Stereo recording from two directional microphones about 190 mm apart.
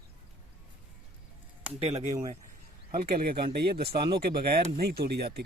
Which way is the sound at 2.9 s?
50° right (ahead or behind).